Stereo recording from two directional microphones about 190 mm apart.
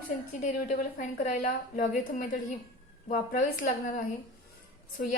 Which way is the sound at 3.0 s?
45° left (ahead or behind).